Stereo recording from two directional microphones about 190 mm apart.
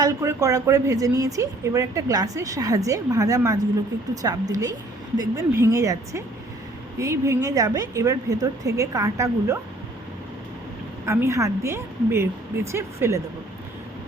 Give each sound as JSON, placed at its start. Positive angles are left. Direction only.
{"t": 0.0, "sound": "a woman's voice", "side_deg": -15}
{"t": 11.0, "sound": "a woman's voice", "side_deg": -15}